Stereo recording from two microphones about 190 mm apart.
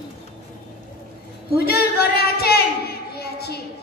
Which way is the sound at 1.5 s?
55° left (ahead or behind).